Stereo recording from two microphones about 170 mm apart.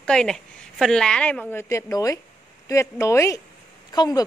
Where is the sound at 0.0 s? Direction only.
5° left (ahead or behind).